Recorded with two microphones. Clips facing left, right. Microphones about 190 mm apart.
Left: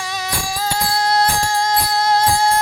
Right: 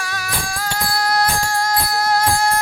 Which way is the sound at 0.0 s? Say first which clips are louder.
Left 2 dB; 20° left (ahead or behind).